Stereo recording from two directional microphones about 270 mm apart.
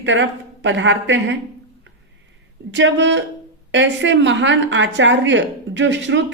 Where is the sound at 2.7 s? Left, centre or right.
Right.